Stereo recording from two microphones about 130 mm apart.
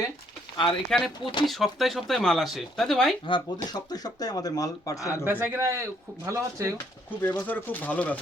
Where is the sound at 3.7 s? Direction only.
30° left (ahead or behind).